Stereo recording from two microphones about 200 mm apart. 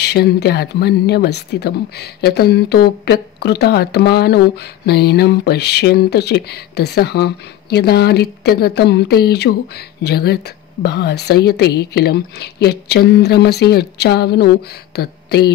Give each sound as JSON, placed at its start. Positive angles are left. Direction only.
{"t": 0.0, "sound": "speech", "side_deg": 55}